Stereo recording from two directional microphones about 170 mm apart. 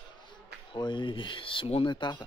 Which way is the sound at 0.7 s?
30° left (ahead or behind).